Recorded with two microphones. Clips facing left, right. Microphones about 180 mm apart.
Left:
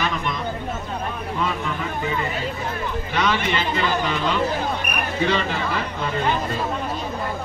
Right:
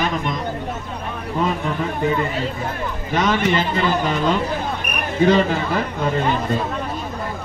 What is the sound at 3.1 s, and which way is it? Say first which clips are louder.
A man's voice: right 5 dB; 45° right (ahead or behind).